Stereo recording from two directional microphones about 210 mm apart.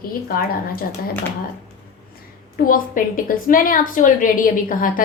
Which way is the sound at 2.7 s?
40° left (ahead or behind).